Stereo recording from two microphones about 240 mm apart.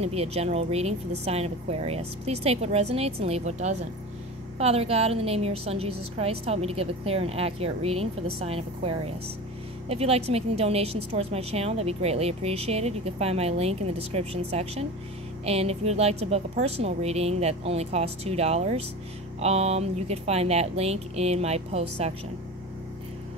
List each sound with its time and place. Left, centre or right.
0.0 s a woman's voice: right